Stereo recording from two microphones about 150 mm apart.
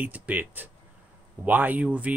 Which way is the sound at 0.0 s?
10° right (ahead or behind).